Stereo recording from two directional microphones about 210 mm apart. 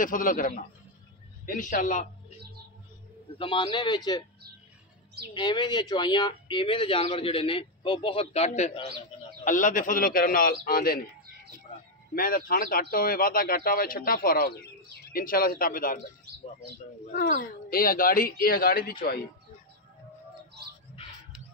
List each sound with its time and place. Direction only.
0.0 s a man's voice: 40° left (ahead or behind)
3.3 s speech: 25° left (ahead or behind)
5.3 s speech: 20° left (ahead or behind); by 11.0 s 45° left (ahead or behind)
12.2 s speech: 40° left (ahead or behind)
17.4 s speech: 45° left (ahead or behind)